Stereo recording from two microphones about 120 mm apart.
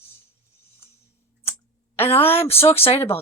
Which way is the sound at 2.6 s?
55° left (ahead or behind).